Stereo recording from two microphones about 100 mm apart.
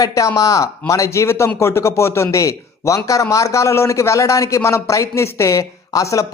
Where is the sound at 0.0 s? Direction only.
35° left (ahead or behind).